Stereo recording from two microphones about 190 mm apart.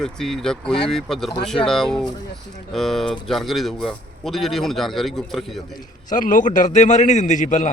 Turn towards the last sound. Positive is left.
turn(degrees=40)  # may be behind; listen again after turning